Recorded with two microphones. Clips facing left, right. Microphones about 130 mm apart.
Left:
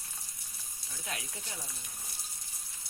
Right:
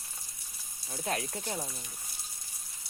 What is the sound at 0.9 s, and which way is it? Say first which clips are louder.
Speech: right 9 dB; 40° right (ahead or behind).